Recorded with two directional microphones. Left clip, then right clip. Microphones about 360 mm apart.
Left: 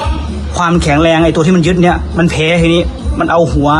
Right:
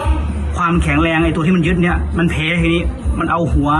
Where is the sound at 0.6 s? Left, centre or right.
Centre.